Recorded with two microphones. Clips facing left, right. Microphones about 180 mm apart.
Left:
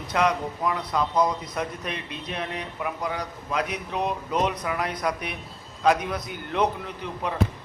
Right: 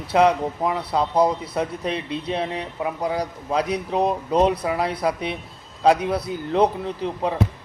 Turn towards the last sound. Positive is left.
turn(degrees=-30)  # may be behind; listen again after turning